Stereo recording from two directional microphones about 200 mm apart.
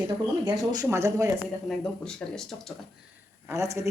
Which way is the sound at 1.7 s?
Centre (ahead or behind).